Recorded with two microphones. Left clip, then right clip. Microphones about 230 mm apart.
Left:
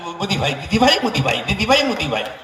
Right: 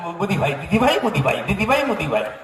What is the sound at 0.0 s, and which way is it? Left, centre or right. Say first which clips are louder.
A man's voice: even; right.